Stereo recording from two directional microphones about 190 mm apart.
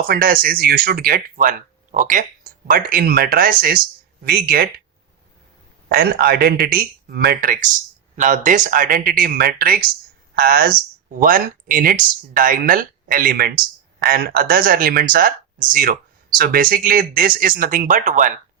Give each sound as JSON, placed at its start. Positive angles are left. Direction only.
{"t": 0.1, "sound": "speech", "side_deg": -50}
{"t": 5.9, "sound": "speech", "side_deg": -50}